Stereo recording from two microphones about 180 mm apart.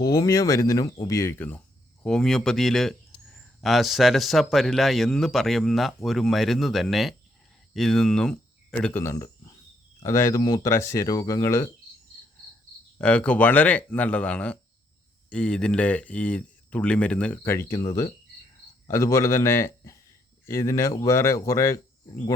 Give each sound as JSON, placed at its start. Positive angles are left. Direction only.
{"t": 0.0, "sound": "speech", "side_deg": 20}
{"t": 13.0, "sound": "a man's voice", "side_deg": 5}